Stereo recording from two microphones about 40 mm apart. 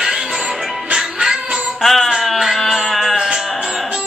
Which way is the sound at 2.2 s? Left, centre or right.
Centre.